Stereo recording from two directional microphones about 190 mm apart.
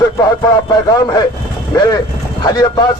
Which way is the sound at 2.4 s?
20° left (ahead or behind).